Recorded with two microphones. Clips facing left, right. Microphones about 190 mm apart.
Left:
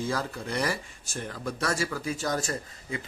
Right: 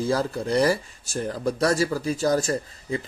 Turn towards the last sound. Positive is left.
turn(degrees=-35)  # may be behind; listen again after turning